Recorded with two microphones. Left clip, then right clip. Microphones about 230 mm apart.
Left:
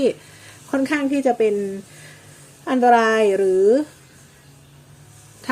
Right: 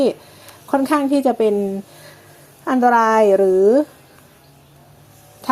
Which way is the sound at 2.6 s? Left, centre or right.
Centre.